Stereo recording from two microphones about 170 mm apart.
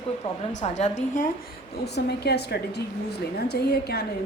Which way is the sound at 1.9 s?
75° left (ahead or behind).